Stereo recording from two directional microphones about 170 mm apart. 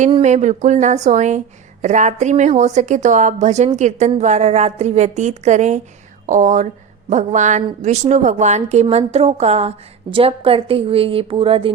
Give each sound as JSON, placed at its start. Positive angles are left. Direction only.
{"t": 0.2, "sound": "a woman's voice", "side_deg": -45}